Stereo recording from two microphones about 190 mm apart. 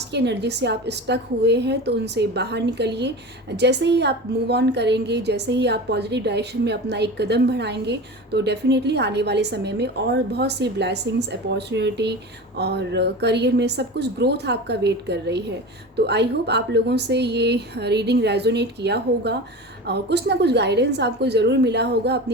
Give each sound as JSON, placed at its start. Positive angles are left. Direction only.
{"t": 0.1, "sound": "a woman's voice", "side_deg": -60}